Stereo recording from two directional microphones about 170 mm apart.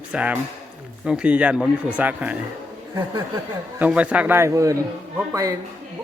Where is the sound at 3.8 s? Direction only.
5° right (ahead or behind).